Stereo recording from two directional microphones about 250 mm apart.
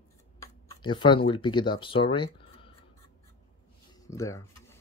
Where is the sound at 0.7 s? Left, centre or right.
Centre.